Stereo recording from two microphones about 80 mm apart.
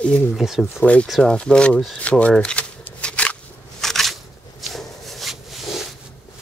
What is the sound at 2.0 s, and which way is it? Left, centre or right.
Shuffling cards, centre.